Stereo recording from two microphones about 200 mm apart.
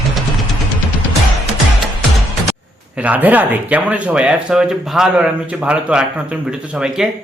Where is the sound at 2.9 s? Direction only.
5° right (ahead or behind).